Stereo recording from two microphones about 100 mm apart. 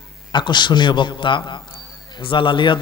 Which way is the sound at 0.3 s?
50° left (ahead or behind).